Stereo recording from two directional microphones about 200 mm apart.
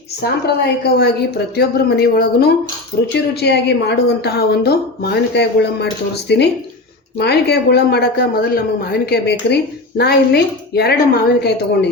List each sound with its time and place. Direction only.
0.2 s a woman's voice: 50° left (ahead or behind)